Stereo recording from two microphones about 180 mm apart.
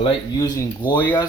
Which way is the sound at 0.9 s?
10° left (ahead or behind).